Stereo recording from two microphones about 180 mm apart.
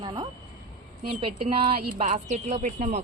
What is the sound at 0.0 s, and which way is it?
Speech, 25° right (ahead or behind).